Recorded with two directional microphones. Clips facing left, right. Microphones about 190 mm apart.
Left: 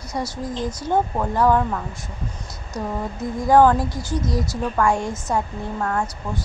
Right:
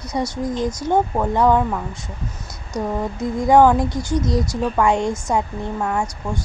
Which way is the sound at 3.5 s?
15° right (ahead or behind).